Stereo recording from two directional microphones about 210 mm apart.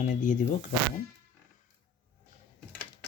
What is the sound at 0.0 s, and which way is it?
Speech, 35° left (ahead or behind).